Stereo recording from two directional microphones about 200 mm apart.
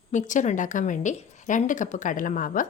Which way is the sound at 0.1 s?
40° left (ahead or behind).